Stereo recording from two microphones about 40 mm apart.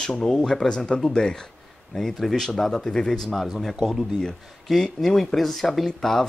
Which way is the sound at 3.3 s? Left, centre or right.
Centre.